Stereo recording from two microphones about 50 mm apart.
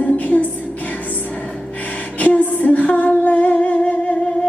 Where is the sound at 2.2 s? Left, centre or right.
Left.